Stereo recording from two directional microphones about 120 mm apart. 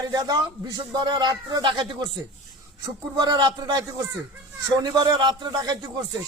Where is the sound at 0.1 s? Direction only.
35° right (ahead or behind).